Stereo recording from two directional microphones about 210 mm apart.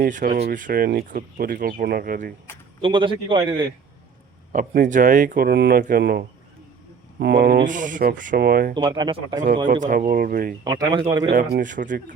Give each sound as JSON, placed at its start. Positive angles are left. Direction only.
{"t": 0.0, "sound": "speech", "side_deg": -40}
{"t": 2.8, "sound": "a man's voice", "side_deg": -25}
{"t": 4.5, "sound": "speech", "side_deg": -40}
{"t": 8.7, "sound": "a man's voice", "side_deg": -20}
{"t": 9.8, "sound": "speech", "side_deg": -40}
{"t": 10.6, "sound": "a man's voice", "side_deg": -20}
{"t": 11.3, "sound": "speech", "side_deg": -45}